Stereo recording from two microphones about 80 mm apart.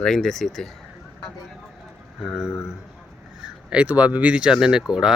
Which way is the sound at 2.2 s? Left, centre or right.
Centre.